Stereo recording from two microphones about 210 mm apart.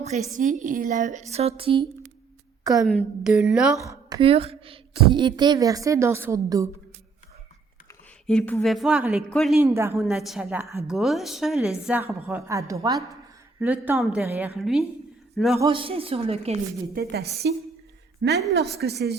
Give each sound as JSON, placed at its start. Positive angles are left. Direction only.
{"t": 0.3, "sound": "a woman's voice", "side_deg": -40}
{"t": 2.8, "sound": "a woman's voice", "side_deg": 0}
{"t": 3.8, "sound": "a woman's voice", "side_deg": -20}
{"t": 8.3, "sound": "a woman's voice", "side_deg": 5}
{"t": 9.6, "sound": "a woman's voice", "side_deg": -15}
{"t": 10.0, "sound": "a woman's voice", "side_deg": 0}
{"t": 10.9, "sound": "a woman's voice", "side_deg": 0}
{"t": 15.6, "sound": "a woman's voice", "side_deg": -25}
{"t": 16.9, "sound": "a woman's voice", "side_deg": -50}